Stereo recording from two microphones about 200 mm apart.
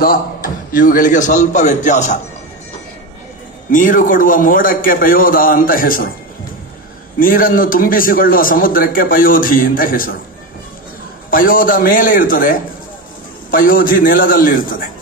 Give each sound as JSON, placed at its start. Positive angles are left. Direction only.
{"t": 0.0, "sound": "a man's voice", "side_deg": 45}
{"t": 3.7, "sound": "a man's voice", "side_deg": 40}
{"t": 7.2, "sound": "a man's voice", "side_deg": 45}
{"t": 11.2, "sound": "a man's voice", "side_deg": 45}